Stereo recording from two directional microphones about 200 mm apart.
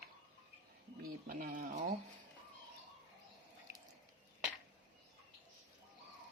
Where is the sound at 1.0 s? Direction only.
45° right (ahead or behind).